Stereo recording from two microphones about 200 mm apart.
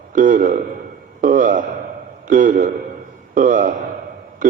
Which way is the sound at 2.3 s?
40° right (ahead or behind).